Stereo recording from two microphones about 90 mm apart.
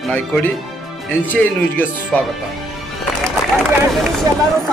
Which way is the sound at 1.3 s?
20° left (ahead or behind).